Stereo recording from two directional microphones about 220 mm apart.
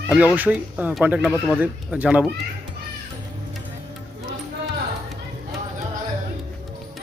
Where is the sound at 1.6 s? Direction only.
5° right (ahead or behind).